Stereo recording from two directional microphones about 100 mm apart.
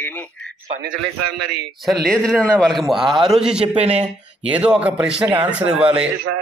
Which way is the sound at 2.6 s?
Centre (ahead or behind).